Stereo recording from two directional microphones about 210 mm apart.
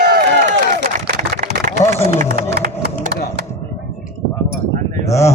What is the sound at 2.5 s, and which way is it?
Music, 50° right (ahead or behind).